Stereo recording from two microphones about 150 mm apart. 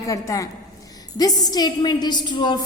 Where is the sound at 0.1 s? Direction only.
20° left (ahead or behind).